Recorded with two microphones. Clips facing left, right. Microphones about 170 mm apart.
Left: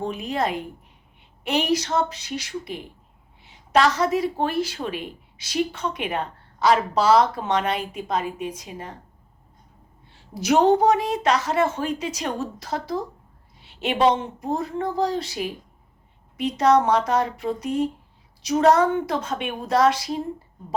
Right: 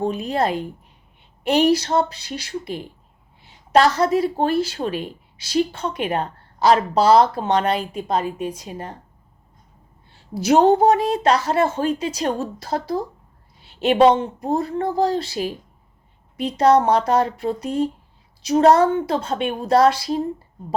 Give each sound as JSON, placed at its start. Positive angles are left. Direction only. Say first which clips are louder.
{"t": 0.0, "sound": "a woman's voice", "louder": "right 4 dB", "side_deg": -35}
{"t": 10.4, "sound": "a woman's voice", "louder": "right 3 dB", "side_deg": -30}
{"t": 13.6, "sound": "a sound", "louder": "right 7 dB", "side_deg": -40}
{"t": 14.4, "sound": "a woman's voice", "louder": "right 3 dB", "side_deg": -35}